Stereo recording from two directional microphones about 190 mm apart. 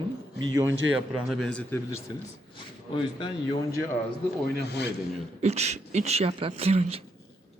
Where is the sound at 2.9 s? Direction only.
25° left (ahead or behind).